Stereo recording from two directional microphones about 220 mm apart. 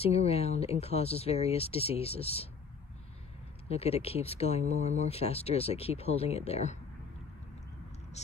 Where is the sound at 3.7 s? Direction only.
30° left (ahead or behind).